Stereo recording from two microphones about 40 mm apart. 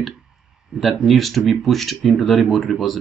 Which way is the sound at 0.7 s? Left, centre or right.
Centre.